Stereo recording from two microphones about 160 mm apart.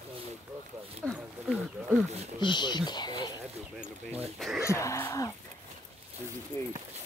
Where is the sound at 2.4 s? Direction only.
30° left (ahead or behind).